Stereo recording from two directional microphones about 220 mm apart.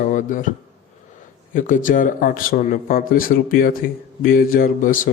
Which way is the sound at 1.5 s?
35° left (ahead or behind).